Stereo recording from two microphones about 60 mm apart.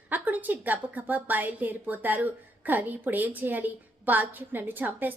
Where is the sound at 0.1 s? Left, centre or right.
Right.